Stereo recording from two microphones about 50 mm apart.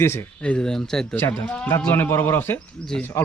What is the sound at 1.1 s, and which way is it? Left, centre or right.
A man's voice, left.